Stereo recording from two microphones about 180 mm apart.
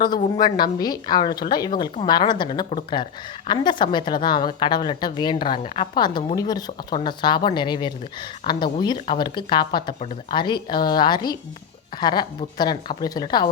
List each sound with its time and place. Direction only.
0.3 s a woman's voice: 25° left (ahead or behind)